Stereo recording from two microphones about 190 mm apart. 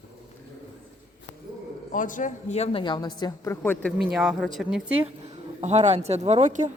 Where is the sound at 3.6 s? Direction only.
5° left (ahead or behind).